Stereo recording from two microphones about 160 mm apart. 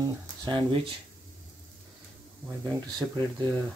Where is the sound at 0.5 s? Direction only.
30° right (ahead or behind).